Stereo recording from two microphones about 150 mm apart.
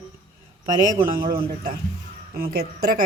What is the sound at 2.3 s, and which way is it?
Speech, 90° right.